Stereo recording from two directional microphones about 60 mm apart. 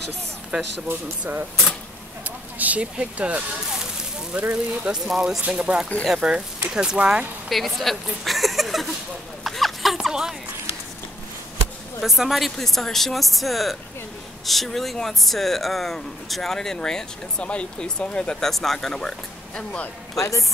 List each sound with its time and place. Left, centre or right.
0.5 s speech: centre
2.2 s speech: right
3.8 s a sound: right
5.0 s speech: centre
5.5 s speech: centre
7.4 s speech: centre
9.4 s a sound: centre
9.9 s speech: centre
12.0 s speech: centre
18.5 s speech: centre
20.2 s a woman's voice: left